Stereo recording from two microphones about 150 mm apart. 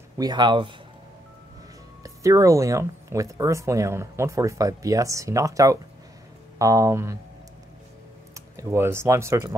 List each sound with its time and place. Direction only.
0.2 s speech: 30° right (ahead or behind)
2.0 s speech: 20° right (ahead or behind)
8.4 s speech: 20° right (ahead or behind)